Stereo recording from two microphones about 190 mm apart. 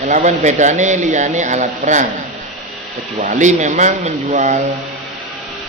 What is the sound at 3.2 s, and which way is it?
Speech, 40° right (ahead or behind).